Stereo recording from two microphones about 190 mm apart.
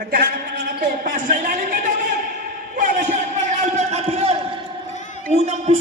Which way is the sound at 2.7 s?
40° right (ahead or behind).